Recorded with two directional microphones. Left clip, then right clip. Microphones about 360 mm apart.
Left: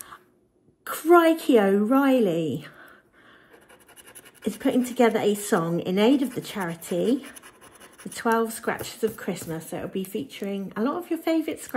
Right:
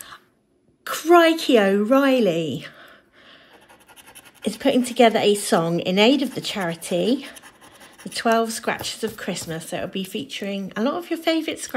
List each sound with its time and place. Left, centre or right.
0.8 s speech: centre
4.5 s speech: centre